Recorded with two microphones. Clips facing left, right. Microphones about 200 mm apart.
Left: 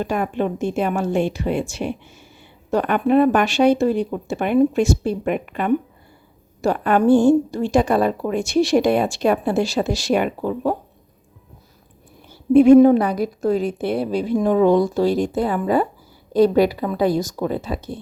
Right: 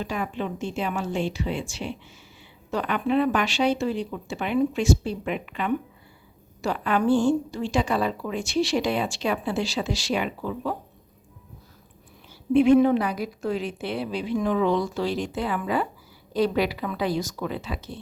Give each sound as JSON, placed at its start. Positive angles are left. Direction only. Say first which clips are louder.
{"t": 0.0, "sound": "a woman's voice", "louder": "left 7 dB", "side_deg": 55}
{"t": 12.5, "sound": "a woman's voice", "louder": "left 7 dB", "side_deg": 45}